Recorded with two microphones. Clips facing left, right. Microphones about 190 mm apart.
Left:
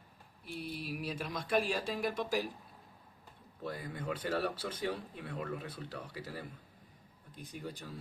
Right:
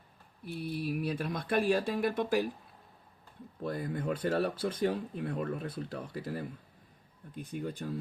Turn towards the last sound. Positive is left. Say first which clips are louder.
# right 7 dB
turn(degrees=-55)  # may be behind; listen again after turning